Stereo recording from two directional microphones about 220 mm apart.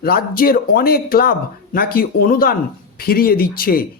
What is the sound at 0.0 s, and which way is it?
Speech, 45° left (ahead or behind).